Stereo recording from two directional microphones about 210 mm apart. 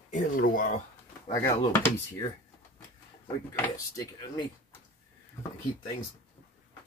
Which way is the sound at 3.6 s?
15° left (ahead or behind).